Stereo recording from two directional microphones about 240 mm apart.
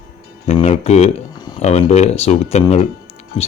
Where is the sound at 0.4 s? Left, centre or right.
Left.